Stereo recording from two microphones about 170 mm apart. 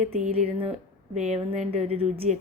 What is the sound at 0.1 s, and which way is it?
Speech, 35° right (ahead or behind).